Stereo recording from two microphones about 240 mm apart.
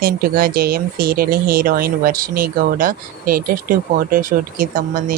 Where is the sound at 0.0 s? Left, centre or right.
Right.